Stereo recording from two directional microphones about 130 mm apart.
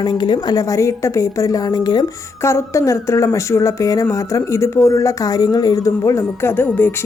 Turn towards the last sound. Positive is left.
turn(degrees=15)  # may be behind; listen again after turning